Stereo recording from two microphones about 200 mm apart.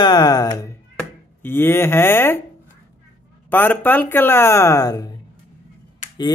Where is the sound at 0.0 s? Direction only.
20° left (ahead or behind).